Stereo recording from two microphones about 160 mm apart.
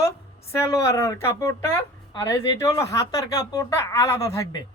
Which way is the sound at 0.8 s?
20° left (ahead or behind).